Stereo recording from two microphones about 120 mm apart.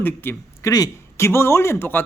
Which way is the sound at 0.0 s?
20° left (ahead or behind).